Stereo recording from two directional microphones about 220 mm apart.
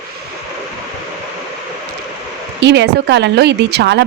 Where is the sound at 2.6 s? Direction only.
50° right (ahead or behind).